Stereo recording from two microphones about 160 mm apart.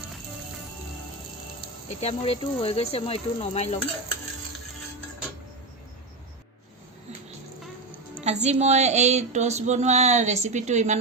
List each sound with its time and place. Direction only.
2.0 s speech: 40° left (ahead or behind)
8.2 s female singing: 45° right (ahead or behind)